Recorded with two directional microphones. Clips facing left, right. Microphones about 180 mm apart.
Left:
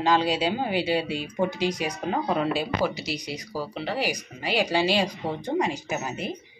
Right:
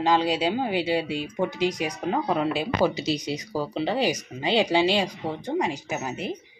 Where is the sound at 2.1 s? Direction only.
10° right (ahead or behind).